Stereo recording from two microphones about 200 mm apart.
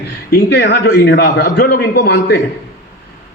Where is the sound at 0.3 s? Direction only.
55° left (ahead or behind).